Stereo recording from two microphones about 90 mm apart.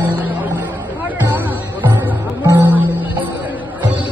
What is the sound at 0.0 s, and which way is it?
Music, 20° right (ahead or behind).